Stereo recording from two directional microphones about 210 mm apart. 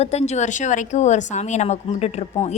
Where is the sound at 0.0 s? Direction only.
30° left (ahead or behind).